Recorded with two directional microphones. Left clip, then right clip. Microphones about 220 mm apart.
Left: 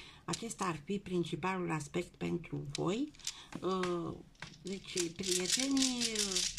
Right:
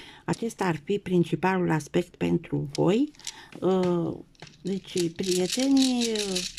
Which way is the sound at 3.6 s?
35° right (ahead or behind).